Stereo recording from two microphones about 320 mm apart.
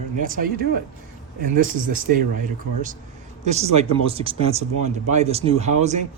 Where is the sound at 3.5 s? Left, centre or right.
Centre.